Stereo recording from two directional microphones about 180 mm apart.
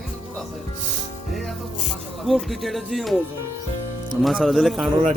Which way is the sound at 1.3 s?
Centre (ahead or behind).